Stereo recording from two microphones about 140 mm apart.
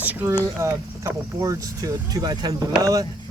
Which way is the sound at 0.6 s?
25° right (ahead or behind).